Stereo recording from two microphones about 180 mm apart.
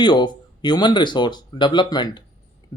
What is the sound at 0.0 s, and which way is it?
Speech, 25° left (ahead or behind).